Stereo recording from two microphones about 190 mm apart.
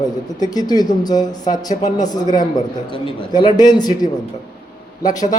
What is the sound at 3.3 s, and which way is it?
Speech, 20° left (ahead or behind).